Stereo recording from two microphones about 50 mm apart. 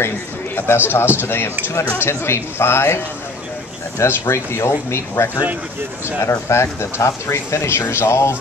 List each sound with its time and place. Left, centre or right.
0.6 s speech: left
2.0 s speech: left
4.0 s speech: left